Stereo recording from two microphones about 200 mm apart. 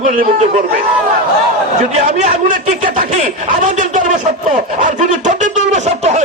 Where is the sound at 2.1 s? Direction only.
35° right (ahead or behind).